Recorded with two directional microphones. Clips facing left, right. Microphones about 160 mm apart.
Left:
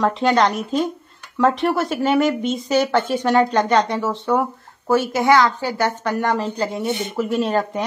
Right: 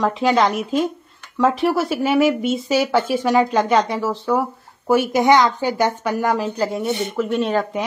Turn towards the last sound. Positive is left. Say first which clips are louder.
# even
turn(degrees=0)  # may be behind; listen again after turning